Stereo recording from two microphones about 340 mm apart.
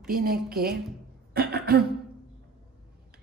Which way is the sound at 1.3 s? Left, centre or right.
Right.